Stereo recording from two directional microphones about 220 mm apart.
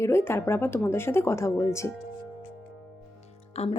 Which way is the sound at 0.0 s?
10° left (ahead or behind).